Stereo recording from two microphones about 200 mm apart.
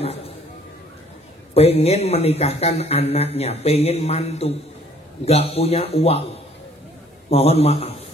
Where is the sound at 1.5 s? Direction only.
30° left (ahead or behind).